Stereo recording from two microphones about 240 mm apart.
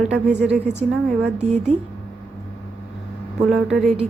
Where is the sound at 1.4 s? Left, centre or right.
Right.